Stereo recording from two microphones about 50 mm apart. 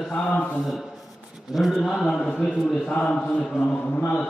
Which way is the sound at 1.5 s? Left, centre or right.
Centre.